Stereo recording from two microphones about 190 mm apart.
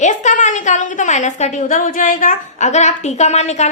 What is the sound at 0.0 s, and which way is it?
A woman's voice, 40° left (ahead or behind).